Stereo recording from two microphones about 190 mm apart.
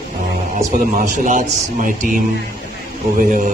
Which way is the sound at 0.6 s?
40° right (ahead or behind).